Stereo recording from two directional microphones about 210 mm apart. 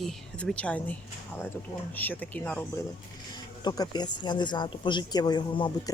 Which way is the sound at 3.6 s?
20° left (ahead or behind).